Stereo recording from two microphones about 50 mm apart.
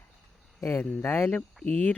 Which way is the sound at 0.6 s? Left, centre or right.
Left.